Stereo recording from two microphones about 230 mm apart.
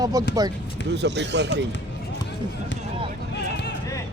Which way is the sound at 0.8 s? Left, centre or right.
Right.